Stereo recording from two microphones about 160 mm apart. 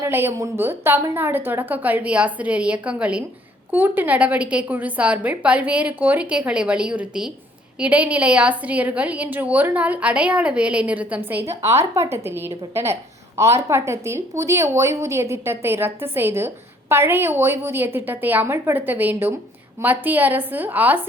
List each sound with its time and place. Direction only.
0.0 s a woman's voice: 15° right (ahead or behind)